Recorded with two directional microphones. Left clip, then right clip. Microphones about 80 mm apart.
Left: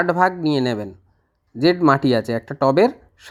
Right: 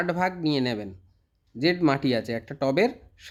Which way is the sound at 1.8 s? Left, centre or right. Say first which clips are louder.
Left 8 dB; left.